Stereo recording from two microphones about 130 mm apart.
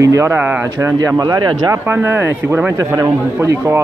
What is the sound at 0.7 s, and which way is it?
Speech, 25° right (ahead or behind).